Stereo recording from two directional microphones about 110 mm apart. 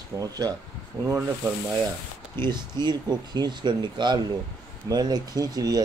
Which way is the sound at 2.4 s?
40° right (ahead or behind).